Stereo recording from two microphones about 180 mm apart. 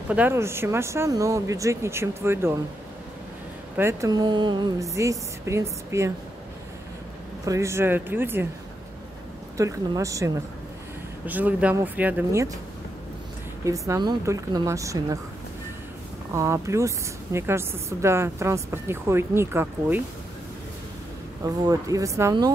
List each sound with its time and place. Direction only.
0.1 s speech: 10° right (ahead or behind)
3.7 s speech: 15° right (ahead or behind)
7.4 s speech: 15° right (ahead or behind)
9.6 s speech: 20° right (ahead or behind)
13.7 s speech: 20° right (ahead or behind)
16.3 s speech: 15° right (ahead or behind)
21.6 s speech: 20° right (ahead or behind)